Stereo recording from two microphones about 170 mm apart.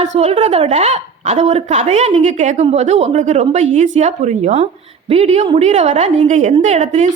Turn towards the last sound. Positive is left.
turn(degrees=-40)  # may be behind; listen again after turning